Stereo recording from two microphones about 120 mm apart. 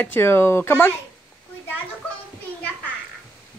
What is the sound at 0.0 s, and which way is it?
Speech, 20° left (ahead or behind).